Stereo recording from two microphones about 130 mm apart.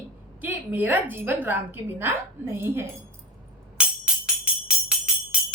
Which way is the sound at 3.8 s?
10° right (ahead or behind).